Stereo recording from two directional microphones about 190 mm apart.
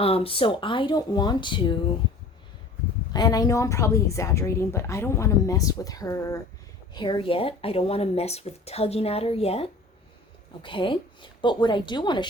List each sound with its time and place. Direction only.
0.0 s speech: 30° left (ahead or behind)
3.1 s a woman's voice: 20° left (ahead or behind)